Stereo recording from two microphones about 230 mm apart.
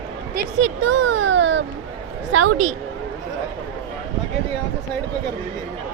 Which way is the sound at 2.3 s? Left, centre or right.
Right.